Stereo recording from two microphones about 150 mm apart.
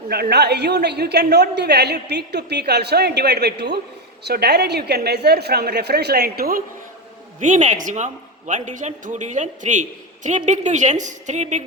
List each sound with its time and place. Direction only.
0.1 s a woman's voice: 90° right
7.3 s a woman's voice: 55° right (ahead or behind)